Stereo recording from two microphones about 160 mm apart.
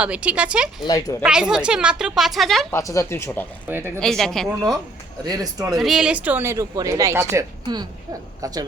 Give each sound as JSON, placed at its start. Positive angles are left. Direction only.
{"t": 0.0, "sound": "speech", "side_deg": -10}
{"t": 0.9, "sound": "speech", "side_deg": 20}
{"t": 1.2, "sound": "a woman's voice", "side_deg": -5}
{"t": 2.7, "sound": "speech", "side_deg": 20}
{"t": 3.7, "sound": "speech", "side_deg": -15}
{"t": 4.0, "sound": "a woman's voice", "side_deg": 0}
{"t": 5.2, "sound": "speech", "side_deg": -25}
{"t": 5.7, "sound": "speech", "side_deg": 0}